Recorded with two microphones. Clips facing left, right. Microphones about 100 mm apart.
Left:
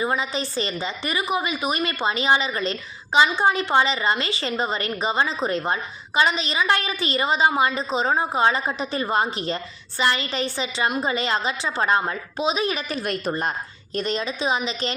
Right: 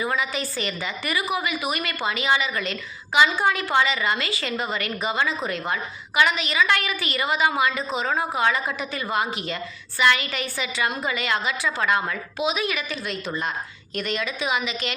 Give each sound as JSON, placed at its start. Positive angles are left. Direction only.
{"t": 0.0, "sound": "a woman's voice", "side_deg": 30}
{"t": 13.0, "sound": "a woman's voice", "side_deg": 50}
{"t": 13.9, "sound": "a woman's voice", "side_deg": 30}